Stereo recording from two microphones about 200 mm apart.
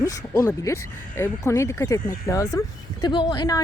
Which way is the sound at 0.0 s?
15° left (ahead or behind).